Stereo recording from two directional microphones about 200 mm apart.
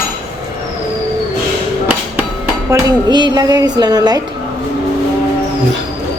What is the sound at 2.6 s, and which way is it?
Speech, 20° right (ahead or behind).